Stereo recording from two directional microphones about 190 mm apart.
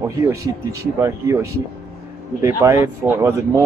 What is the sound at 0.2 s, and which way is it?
Speech, 15° right (ahead or behind).